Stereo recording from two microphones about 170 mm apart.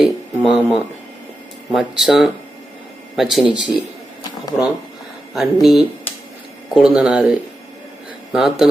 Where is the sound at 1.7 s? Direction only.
Centre (ahead or behind).